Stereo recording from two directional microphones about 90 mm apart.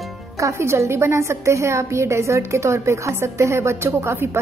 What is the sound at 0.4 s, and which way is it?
A woman's voice, 35° right (ahead or behind).